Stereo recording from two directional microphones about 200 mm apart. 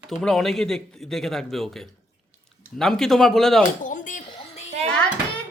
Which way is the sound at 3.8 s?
40° left (ahead or behind).